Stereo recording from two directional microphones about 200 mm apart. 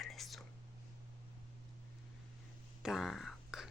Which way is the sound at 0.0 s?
Centre (ahead or behind).